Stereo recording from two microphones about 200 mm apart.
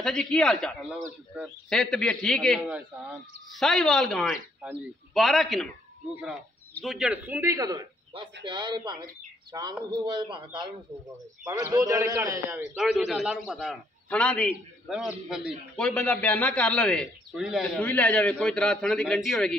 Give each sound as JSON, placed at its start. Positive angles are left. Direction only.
{"t": 0.0, "sound": "a man's voice", "side_deg": 5}
{"t": 1.7, "sound": "a man's voice", "side_deg": 5}
{"t": 6.7, "sound": "a man's voice", "side_deg": 0}